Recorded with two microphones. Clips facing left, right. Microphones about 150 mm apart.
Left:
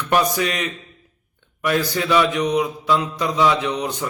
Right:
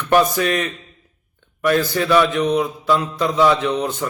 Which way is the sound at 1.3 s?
15° left (ahead or behind).